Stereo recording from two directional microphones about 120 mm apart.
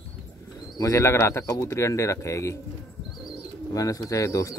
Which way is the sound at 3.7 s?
30° left (ahead or behind).